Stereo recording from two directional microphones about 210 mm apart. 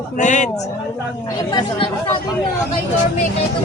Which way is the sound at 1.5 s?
20° left (ahead or behind).